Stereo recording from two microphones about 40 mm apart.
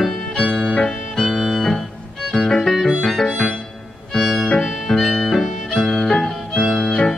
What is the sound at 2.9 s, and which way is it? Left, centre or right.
Music, centre.